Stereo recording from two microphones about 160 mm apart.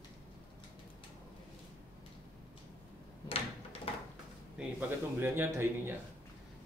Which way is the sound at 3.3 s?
35° left (ahead or behind).